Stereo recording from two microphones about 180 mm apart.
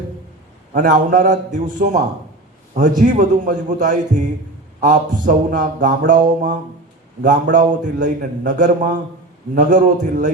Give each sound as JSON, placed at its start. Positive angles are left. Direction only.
{"t": 0.7, "sound": "a man's voice", "side_deg": -45}